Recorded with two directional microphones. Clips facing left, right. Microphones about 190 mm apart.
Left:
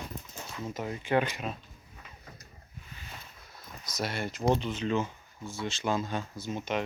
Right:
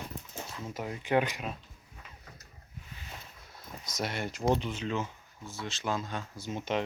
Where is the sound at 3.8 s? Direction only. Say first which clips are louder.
Left 1 dB; 20° right (ahead or behind); by 6.3 s centre (ahead or behind).